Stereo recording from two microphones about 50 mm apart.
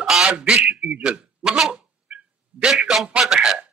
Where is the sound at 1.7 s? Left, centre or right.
Centre.